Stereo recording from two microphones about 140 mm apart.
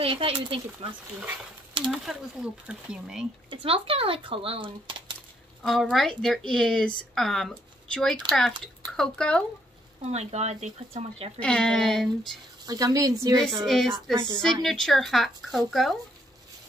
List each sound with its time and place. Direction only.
0.0 s speech: 40° right (ahead or behind)
1.9 s speech: 5° right (ahead or behind)
3.4 s speech: 40° right (ahead or behind)
5.6 s speech: centre (ahead or behind)
10.1 s speech: 50° right (ahead or behind)
11.3 s speech: 5° left (ahead or behind)
12.6 s speech: 25° right (ahead or behind)
13.7 s speech: centre (ahead or behind)